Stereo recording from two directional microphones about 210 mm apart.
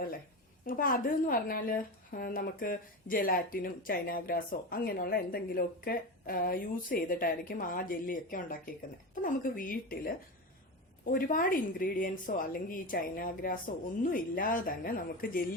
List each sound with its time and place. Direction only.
0.7 s a woman's voice: 40° left (ahead or behind)